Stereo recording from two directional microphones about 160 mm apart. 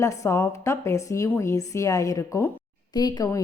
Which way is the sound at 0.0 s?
20° left (ahead or behind).